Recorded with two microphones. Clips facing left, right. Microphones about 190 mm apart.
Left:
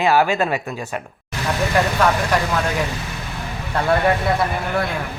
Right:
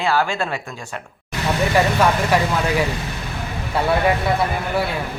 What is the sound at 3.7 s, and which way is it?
Speech, 5° right (ahead or behind).